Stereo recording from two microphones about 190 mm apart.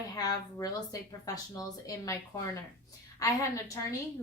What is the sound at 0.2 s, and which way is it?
Speech, 20° left (ahead or behind).